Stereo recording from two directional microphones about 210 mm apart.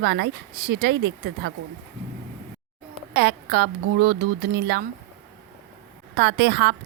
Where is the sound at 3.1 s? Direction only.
55° right (ahead or behind).